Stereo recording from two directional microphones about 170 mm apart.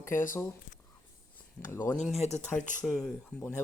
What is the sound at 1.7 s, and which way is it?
Speech, 15° left (ahead or behind).